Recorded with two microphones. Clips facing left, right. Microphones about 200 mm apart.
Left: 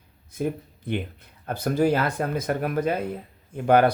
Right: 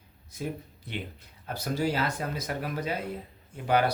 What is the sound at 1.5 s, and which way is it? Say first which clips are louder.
Speech: left 7 dB; 55° left (ahead or behind).